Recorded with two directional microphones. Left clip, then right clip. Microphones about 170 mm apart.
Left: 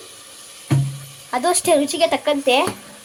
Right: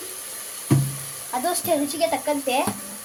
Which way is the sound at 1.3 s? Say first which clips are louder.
Left 6 dB; 40° left (ahead or behind).